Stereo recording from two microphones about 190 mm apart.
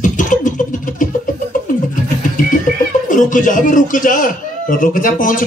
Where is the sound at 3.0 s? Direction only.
45° left (ahead or behind).